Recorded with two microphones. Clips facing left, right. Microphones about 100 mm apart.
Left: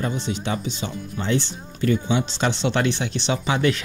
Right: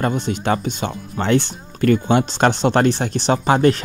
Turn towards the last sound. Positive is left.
turn(degrees=-45)  # may be behind; listen again after turning